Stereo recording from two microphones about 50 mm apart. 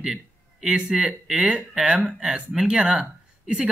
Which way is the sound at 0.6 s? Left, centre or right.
Centre.